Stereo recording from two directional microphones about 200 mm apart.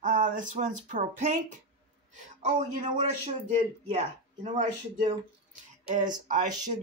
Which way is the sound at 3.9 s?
35° right (ahead or behind).